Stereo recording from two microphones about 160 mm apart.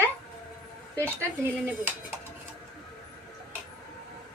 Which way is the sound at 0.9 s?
15° right (ahead or behind).